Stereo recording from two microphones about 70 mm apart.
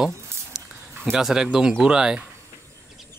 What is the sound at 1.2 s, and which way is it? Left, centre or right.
Speech, centre.